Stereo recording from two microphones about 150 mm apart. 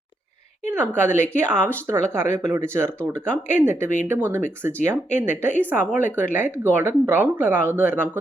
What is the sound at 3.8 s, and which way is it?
Speech, 55° left (ahead or behind).